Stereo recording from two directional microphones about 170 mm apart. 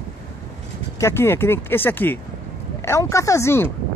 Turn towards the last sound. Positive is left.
turn(degrees=15)  # may be behind; listen again after turning